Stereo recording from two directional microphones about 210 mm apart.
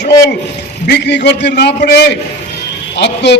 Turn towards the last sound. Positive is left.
turn(degrees=55)  # may be behind; listen again after turning